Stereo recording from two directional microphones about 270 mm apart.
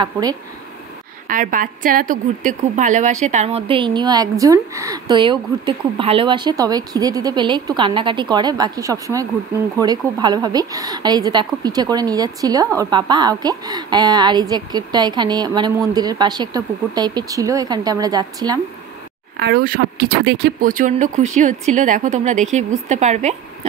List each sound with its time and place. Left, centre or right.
0.0 s a woman's voice: centre
1.2 s a woman's voice: right; by 18.6 s centre
19.4 s speech: right